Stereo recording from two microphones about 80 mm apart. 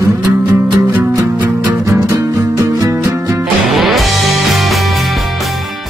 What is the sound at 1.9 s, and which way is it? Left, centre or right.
Music, right.